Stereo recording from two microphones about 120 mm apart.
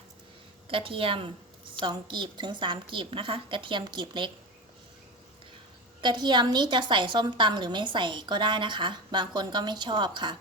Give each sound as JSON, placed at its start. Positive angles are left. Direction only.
{"t": 0.7, "sound": "a woman's voice", "side_deg": -50}
{"t": 6.0, "sound": "a woman's voice", "side_deg": -40}